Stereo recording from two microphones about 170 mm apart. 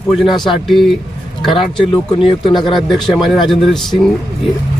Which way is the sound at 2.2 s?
30° left (ahead or behind).